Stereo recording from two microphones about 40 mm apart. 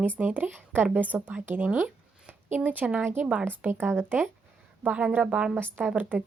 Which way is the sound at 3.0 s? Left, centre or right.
Right.